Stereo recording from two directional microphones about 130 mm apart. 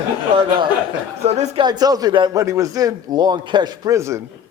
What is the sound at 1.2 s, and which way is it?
Speech, 55° right (ahead or behind).